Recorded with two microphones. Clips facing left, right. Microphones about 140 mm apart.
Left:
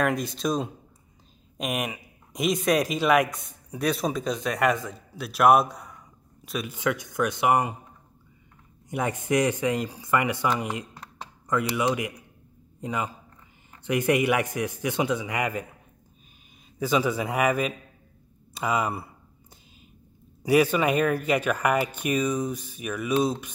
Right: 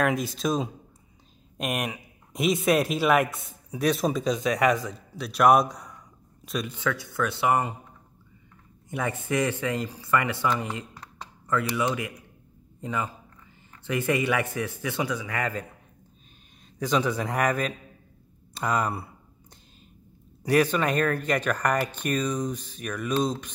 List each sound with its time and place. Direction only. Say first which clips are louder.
0.0 s a man's voice: even; centre (ahead or behind)
6.8 s speech: left 4 dB; 15° left (ahead or behind)
8.8 s speech: left 2 dB; 15° left (ahead or behind)
16.7 s speech: left 1 dB; 5° left (ahead or behind)
20.4 s speech: left 2 dB; 10° left (ahead or behind)